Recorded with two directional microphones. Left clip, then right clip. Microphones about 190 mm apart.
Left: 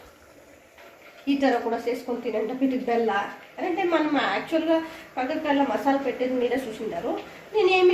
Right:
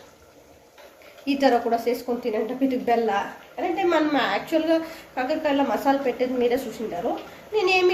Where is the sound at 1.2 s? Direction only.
15° right (ahead or behind).